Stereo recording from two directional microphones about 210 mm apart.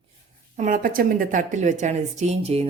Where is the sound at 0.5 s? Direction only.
40° right (ahead or behind).